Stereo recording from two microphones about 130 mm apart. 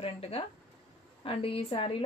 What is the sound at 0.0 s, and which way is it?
A woman's voice, 50° left (ahead or behind).